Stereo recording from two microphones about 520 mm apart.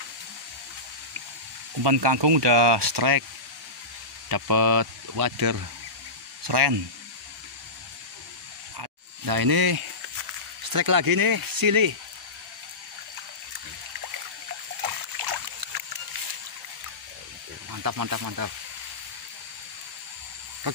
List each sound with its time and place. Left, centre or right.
1.8 s speech: right
4.3 s speech: right
8.7 s snake: right
10.6 s speech: right
14.8 s a sound: right
17.6 s speech: right